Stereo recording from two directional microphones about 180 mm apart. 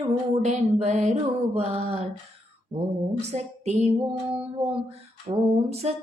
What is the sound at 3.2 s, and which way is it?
Music, 35° right (ahead or behind).